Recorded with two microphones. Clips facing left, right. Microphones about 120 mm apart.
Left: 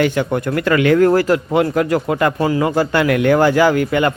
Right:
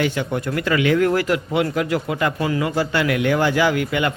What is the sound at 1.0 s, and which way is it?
A man's voice, 40° left (ahead or behind).